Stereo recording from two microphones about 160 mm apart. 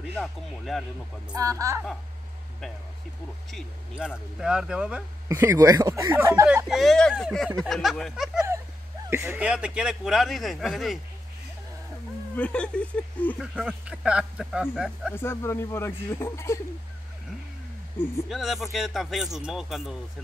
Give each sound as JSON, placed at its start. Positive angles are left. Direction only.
{"t": 0.1, "sound": "speech", "side_deg": 0}
{"t": 1.3, "sound": "a woman's voice", "side_deg": -20}
{"t": 3.5, "sound": "speech", "side_deg": -5}
{"t": 5.3, "sound": "speech", "side_deg": -20}
{"t": 12.4, "sound": "speech", "side_deg": 5}
{"t": 13.4, "sound": "speech", "side_deg": -5}
{"t": 15.1, "sound": "speech", "side_deg": 15}
{"t": 18.3, "sound": "speech", "side_deg": 0}